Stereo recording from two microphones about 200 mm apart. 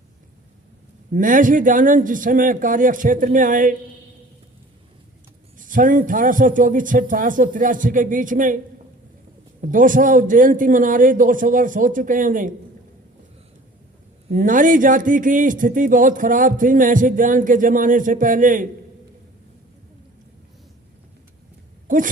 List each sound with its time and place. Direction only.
1.1 s a man's voice: 40° right (ahead or behind)
5.5 s a man's voice: 40° right (ahead or behind)
9.6 s a man's voice: 40° right (ahead or behind)
14.3 s a man's voice: 40° right (ahead or behind)
21.8 s a sound: 40° right (ahead or behind)